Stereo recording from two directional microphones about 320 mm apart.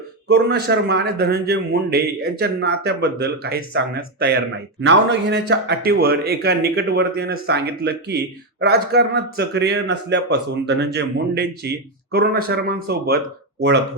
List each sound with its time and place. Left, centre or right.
0.3 s a man's voice: right